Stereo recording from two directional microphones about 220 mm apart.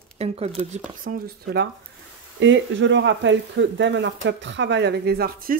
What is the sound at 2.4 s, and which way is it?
Speech, 55° right (ahead or behind).